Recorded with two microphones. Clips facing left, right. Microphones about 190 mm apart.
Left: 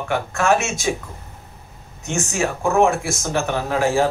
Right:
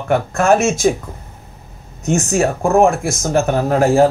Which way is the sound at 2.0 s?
40° right (ahead or behind).